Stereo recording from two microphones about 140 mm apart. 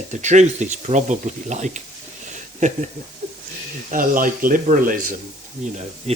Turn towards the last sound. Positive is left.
turn(degrees=-50)  # may be behind; listen again after turning